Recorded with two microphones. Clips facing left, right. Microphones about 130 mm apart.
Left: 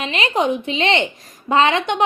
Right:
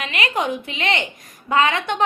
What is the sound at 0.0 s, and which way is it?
A woman's voice, 25° left (ahead or behind).